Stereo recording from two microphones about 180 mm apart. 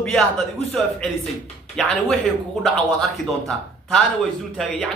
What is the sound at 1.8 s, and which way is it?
A man's voice, centre (ahead or behind).